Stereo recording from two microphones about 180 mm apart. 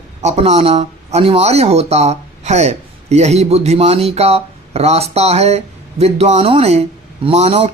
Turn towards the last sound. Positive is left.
turn(degrees=-35)  # may be behind; listen again after turning